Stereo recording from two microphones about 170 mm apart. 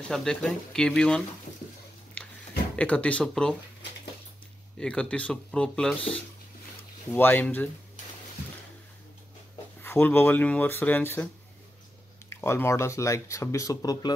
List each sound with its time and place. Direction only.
0.1 s speech: 5° left (ahead or behind)
2.7 s speech: 5° left (ahead or behind)
4.7 s speech: 5° left (ahead or behind)
9.8 s speech: 10° left (ahead or behind)
12.3 s speech: 15° left (ahead or behind)